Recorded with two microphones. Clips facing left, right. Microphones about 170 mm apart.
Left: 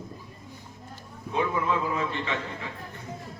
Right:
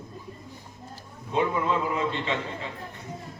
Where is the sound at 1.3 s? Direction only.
25° right (ahead or behind).